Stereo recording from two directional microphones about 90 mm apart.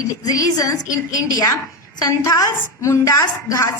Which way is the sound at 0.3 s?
40° left (ahead or behind).